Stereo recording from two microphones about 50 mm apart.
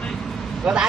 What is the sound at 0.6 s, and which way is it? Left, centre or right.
Vehicle, centre.